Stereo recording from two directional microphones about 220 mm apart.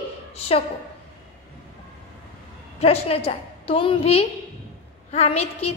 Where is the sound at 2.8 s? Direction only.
30° left (ahead or behind).